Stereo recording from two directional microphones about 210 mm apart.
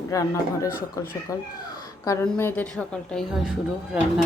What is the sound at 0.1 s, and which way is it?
A woman's voice, 15° left (ahead or behind).